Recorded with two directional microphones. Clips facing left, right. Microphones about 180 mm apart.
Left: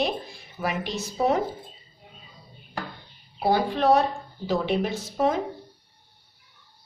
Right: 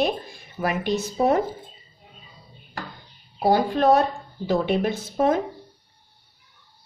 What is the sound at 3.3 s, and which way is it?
Speech, 45° right (ahead or behind).